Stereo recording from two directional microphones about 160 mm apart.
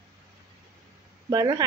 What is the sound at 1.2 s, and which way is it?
Speech, 25° right (ahead or behind).